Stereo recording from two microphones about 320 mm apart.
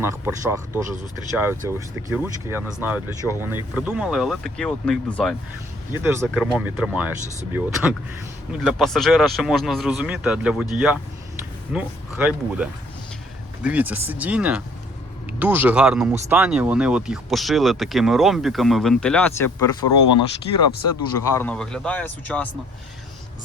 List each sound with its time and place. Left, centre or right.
0.0 s speech: centre
19.8 s speech: left
21.2 s speech: centre